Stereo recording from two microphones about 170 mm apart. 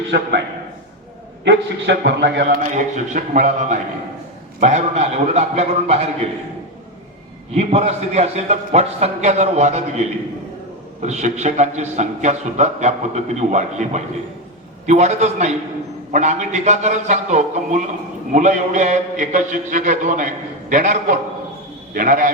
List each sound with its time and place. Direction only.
0.1 s a man's voice: 85° right
1.5 s a man's voice: 85° right
2.7 s a man's voice: 45° right (ahead or behind)
7.5 s a man's voice: 40° right (ahead or behind); by 22.3 s 55° right (ahead or behind)